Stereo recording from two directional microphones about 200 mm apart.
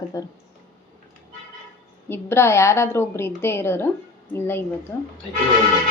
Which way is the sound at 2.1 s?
10° left (ahead or behind).